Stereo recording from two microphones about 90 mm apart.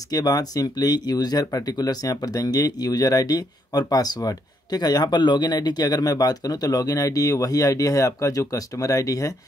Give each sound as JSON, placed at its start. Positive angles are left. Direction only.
{"t": 0.1, "sound": "speech", "side_deg": 45}